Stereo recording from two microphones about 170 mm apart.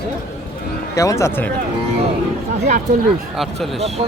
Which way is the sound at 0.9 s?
15° left (ahead or behind).